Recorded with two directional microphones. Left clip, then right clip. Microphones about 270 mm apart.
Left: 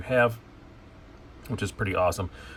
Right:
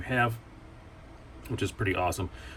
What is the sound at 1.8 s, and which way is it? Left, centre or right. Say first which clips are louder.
Speech: left 4 dB; centre.